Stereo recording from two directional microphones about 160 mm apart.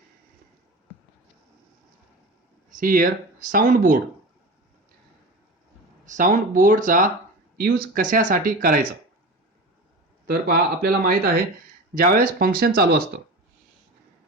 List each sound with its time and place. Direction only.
2.6 s speech: 60° right (ahead or behind)
6.1 s speech: 55° right (ahead or behind)
10.2 s speech: 75° right (ahead or behind)